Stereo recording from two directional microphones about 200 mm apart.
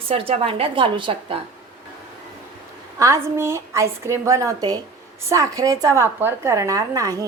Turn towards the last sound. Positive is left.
turn(degrees=-15)  # may be behind; listen again after turning